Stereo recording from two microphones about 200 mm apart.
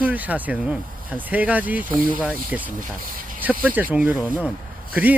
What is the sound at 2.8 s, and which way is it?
Speech, 45° right (ahead or behind).